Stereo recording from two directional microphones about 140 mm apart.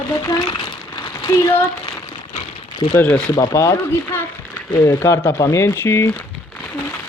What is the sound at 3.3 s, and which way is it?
Speech, 25° left (ahead or behind).